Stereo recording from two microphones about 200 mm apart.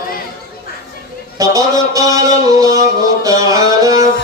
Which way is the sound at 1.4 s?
15° right (ahead or behind).